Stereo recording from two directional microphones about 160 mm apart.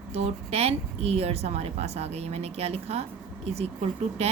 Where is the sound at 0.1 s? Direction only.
40° right (ahead or behind).